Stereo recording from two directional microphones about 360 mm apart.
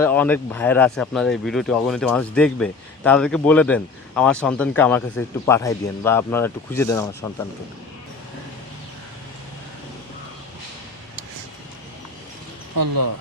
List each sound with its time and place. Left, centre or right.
0.0 s speech: centre
12.7 s speech: right